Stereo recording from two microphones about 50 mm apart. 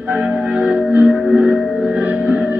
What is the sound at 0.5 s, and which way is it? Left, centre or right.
Singing bowl, right.